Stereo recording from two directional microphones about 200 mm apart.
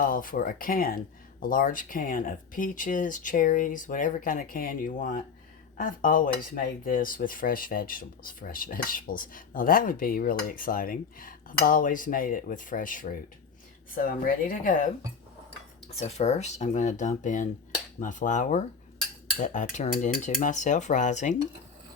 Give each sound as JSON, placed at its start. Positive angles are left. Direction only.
{"t": 0.0, "sound": "speech", "side_deg": 45}
{"t": 15.9, "sound": "speech", "side_deg": 30}